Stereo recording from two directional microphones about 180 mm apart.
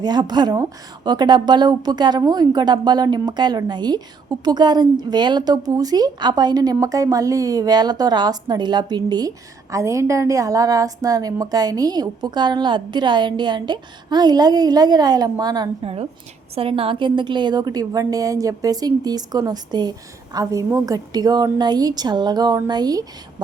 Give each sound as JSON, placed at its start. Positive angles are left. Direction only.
{"t": 0.0, "sound": "a woman's voice", "side_deg": -25}